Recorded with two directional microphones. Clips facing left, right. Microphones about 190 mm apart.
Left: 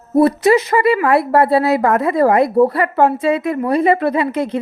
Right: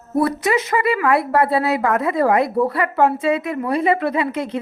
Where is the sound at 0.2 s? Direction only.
30° left (ahead or behind).